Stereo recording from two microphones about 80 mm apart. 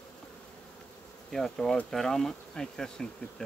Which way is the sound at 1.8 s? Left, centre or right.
Centre.